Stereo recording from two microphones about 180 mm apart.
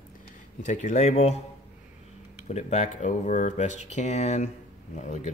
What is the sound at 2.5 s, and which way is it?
Speech, 40° left (ahead or behind).